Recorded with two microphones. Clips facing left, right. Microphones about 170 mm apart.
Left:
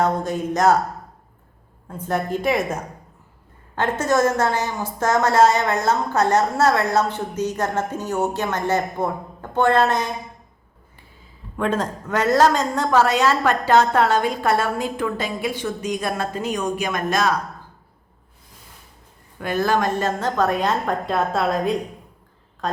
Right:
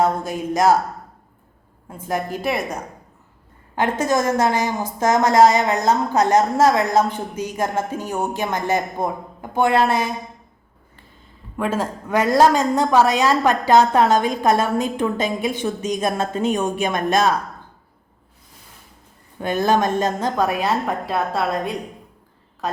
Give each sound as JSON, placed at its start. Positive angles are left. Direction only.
{"t": 0.0, "sound": "a woman's voice", "side_deg": -10}
{"t": 1.9, "sound": "a woman's voice", "side_deg": -10}
{"t": 3.8, "sound": "a woman's voice", "side_deg": -10}
{"t": 11.5, "sound": "a woman's voice", "side_deg": -5}
{"t": 19.4, "sound": "a woman's voice", "side_deg": -20}